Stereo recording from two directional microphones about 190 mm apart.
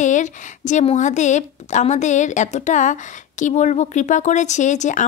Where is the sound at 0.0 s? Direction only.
40° left (ahead or behind).